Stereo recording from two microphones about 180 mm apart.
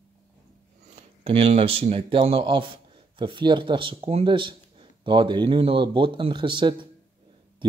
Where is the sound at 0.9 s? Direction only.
40° right (ahead or behind).